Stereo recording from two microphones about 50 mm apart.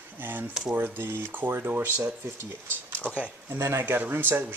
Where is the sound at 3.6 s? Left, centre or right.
Right.